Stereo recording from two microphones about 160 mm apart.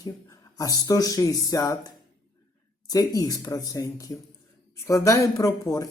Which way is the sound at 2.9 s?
20° left (ahead or behind).